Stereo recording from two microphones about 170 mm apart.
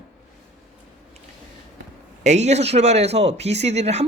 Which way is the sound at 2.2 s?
40° right (ahead or behind).